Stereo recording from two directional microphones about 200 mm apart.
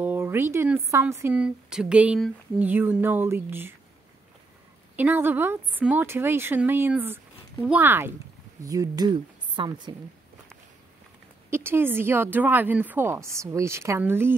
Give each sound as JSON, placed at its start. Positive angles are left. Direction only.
{"t": 0.0, "sound": "speech", "side_deg": -10}
{"t": 4.9, "sound": "speech", "side_deg": -10}
{"t": 11.5, "sound": "speech", "side_deg": -10}